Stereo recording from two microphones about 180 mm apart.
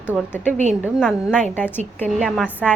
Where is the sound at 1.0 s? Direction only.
5° right (ahead or behind).